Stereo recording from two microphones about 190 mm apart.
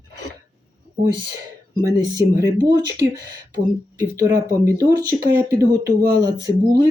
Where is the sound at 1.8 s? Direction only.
20° right (ahead or behind).